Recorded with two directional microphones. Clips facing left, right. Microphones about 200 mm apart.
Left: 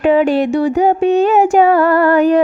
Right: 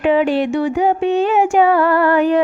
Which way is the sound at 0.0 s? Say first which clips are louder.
Left 3 dB; 45° left (ahead or behind).